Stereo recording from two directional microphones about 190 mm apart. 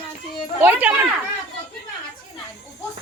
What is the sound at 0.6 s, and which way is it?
Speech, 10° right (ahead or behind).